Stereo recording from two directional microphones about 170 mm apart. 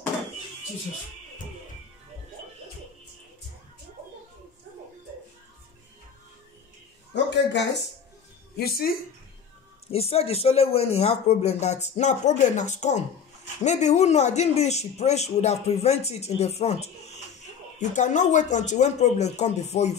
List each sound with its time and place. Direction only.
7.2 s speech: 90° left
8.5 s a woman's voice: 65° left (ahead or behind)
9.8 s speech: 35° left (ahead or behind)